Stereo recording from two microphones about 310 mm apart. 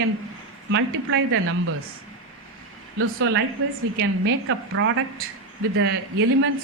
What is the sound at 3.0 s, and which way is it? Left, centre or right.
Speech, right.